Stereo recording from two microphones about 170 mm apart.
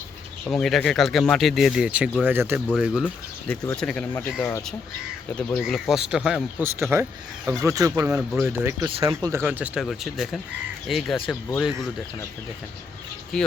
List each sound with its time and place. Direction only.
0.4 s speech: 5° left (ahead or behind); by 2.6 s 10° right (ahead or behind)
2.7 s speech: centre (ahead or behind); by 8.2 s 15° right (ahead or behind)
8.3 s speech: centre (ahead or behind)
8.5 s speech: 15° right (ahead or behind)
9.0 s speech: 25° right (ahead or behind)
9.3 s speech: 10° right (ahead or behind)
13.3 s speech: 5° left (ahead or behind)